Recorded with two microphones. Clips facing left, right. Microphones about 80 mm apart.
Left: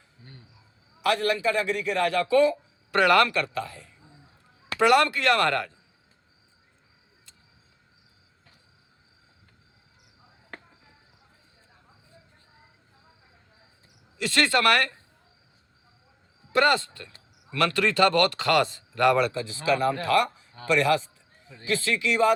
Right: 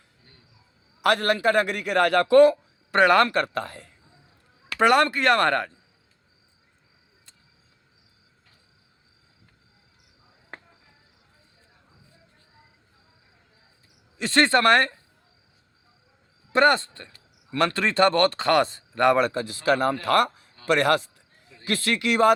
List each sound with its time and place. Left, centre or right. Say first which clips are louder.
1.0 s a man's voice: right 3 dB; right
2.9 s speech: right 2 dB; right
4.8 s speech: right 1 dB; right
14.2 s speech: right 3 dB; right
16.5 s a man's voice: right 3 dB; right